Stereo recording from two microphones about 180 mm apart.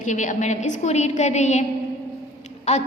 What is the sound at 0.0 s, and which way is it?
A woman's voice, 45° left (ahead or behind).